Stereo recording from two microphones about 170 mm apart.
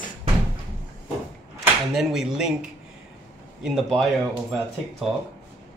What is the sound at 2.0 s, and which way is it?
Speech, 5° right (ahead or behind).